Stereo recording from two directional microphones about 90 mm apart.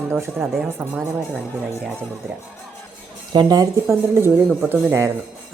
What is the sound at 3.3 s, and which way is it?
Speech, 45° right (ahead or behind).